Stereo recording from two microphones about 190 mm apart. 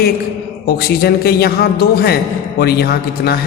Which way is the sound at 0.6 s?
55° left (ahead or behind).